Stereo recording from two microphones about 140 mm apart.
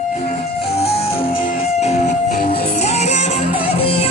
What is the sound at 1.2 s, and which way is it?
Music, 90° left.